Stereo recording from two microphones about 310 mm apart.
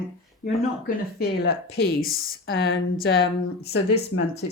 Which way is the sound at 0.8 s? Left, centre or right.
Left.